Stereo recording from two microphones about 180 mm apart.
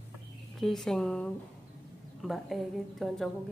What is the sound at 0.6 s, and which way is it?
A woman's voice, centre (ahead or behind).